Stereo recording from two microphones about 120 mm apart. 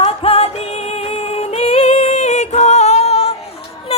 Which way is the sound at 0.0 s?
55° left (ahead or behind).